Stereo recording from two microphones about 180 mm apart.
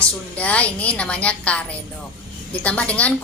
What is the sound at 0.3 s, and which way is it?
A woman's voice, 5° left (ahead or behind).